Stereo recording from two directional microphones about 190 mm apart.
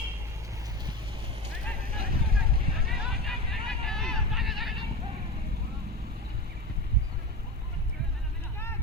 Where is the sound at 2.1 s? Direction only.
55° right (ahead or behind).